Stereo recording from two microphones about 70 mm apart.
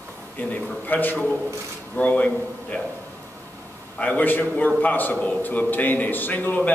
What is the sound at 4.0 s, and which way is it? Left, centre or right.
A man's voice, left.